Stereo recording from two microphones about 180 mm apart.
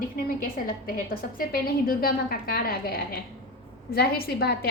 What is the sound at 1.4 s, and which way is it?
A woman's voice, 55° left (ahead or behind).